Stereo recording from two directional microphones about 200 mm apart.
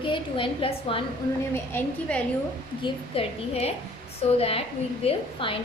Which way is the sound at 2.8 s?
30° left (ahead or behind).